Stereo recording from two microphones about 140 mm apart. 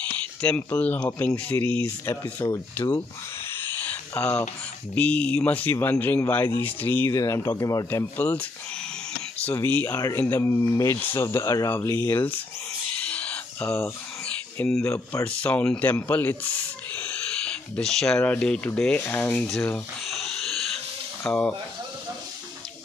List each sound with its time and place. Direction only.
0.4 s speech: 10° left (ahead or behind)
3.5 s a sound: 15° left (ahead or behind)
4.9 s speech: 10° left (ahead or behind)
9.5 s speech: 10° left (ahead or behind)
13.1 s a sound: 10° left (ahead or behind)
14.8 s speech: 20° left (ahead or behind)
15.2 s speech: 10° left (ahead or behind)
16.9 s owl: 10° left (ahead or behind)
18.9 s speech: 15° left (ahead or behind)
19.4 s speech: centre (ahead or behind)
20.1 s owl: centre (ahead or behind)
21.3 s speech: 10° left (ahead or behind)